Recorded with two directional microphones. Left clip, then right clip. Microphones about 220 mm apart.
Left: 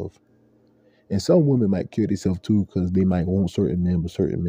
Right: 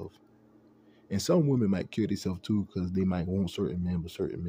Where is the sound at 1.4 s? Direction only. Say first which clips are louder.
Left 8 dB; centre (ahead or behind).